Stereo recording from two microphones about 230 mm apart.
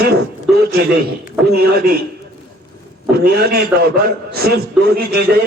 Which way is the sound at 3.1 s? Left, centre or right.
Right.